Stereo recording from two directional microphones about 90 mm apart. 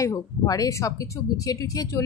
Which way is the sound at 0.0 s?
40° left (ahead or behind).